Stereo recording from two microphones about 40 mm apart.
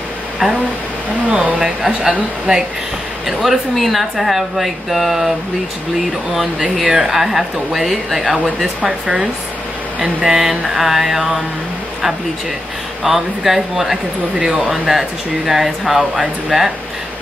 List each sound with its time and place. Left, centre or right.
1.3 s speech: right
1.6 s speech: centre
3.3 s speech: centre
6.3 s speech: centre
8.8 s speech: centre
13.0 s speech: centre